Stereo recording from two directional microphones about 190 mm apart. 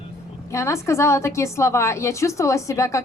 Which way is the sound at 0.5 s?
15° left (ahead or behind).